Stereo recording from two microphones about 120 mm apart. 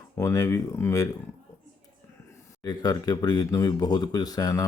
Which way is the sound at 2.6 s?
35° left (ahead or behind).